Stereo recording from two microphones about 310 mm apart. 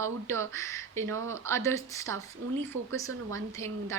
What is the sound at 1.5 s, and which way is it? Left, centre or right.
Speech, centre.